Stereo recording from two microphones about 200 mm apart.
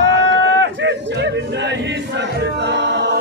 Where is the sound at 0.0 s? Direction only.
65° right (ahead or behind).